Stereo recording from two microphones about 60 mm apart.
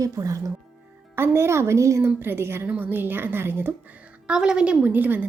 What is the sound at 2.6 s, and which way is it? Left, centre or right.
Speech, right.